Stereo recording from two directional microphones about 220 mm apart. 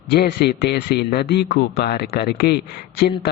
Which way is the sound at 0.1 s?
45° left (ahead or behind).